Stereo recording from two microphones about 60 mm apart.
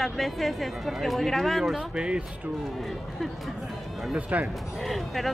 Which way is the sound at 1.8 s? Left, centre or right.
Centre.